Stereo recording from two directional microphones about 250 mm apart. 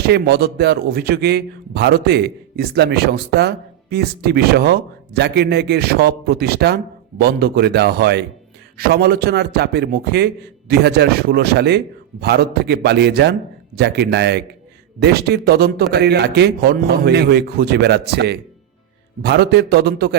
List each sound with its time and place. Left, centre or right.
0.0 s a man's voice: right